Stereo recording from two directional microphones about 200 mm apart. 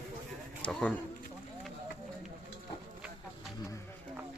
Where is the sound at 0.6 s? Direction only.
5° left (ahead or behind).